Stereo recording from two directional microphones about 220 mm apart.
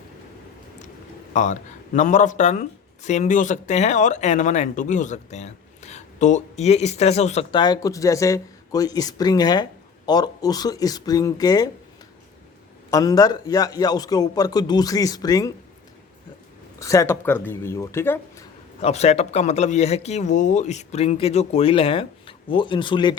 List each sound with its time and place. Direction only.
1.3 s a man's voice: 35° left (ahead or behind); by 11.7 s 15° left (ahead or behind)
12.9 s a man's voice: 15° left (ahead or behind)
16.8 s a man's voice: 15° left (ahead or behind)
18.8 s speech: 30° left (ahead or behind)